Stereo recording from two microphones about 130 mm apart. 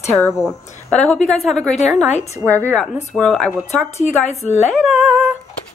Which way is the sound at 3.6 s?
60° left (ahead or behind).